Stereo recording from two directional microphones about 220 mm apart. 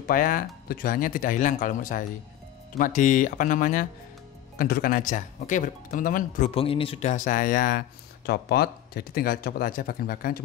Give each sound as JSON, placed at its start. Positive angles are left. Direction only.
{"t": 0.0, "sound": "speech", "side_deg": 40}
{"t": 6.5, "sound": "speech", "side_deg": 25}